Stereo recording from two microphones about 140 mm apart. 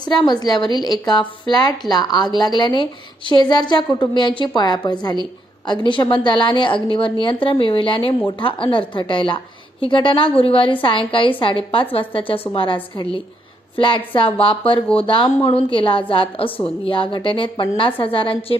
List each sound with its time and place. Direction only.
0.0 s a woman's voice: 30° left (ahead or behind)